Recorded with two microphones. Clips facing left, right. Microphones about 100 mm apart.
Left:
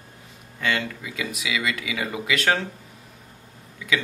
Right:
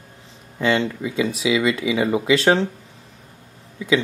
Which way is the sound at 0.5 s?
25° right (ahead or behind).